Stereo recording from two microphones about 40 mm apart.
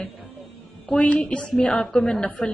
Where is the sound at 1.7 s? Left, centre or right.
Centre.